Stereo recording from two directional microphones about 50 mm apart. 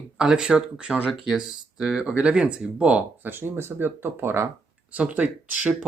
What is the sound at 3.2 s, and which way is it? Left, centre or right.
Speech, right.